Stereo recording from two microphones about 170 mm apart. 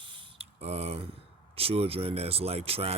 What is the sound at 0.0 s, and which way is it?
Speech, 30° right (ahead or behind).